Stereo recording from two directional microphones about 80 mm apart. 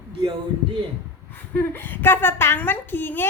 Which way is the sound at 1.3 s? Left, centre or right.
Left.